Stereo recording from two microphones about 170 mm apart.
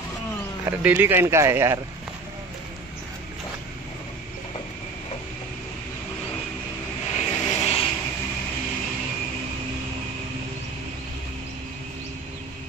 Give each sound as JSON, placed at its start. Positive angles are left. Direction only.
{"t": 0.7, "sound": "speech", "side_deg": -15}
{"t": 7.2, "sound": "vehicle", "side_deg": 40}